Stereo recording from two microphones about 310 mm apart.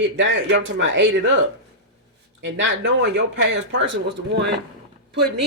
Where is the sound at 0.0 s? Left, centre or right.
Right.